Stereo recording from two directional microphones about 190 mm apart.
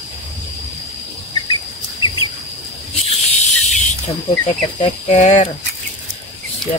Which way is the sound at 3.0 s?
35° left (ahead or behind).